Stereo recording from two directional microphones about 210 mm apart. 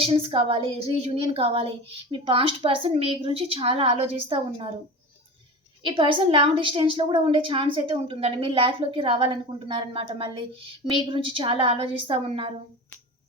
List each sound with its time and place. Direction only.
0.0 s a woman's voice: 25° right (ahead or behind)
5.8 s a woman's voice: 25° right (ahead or behind)